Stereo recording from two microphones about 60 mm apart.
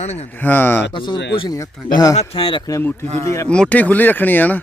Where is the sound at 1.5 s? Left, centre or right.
Left.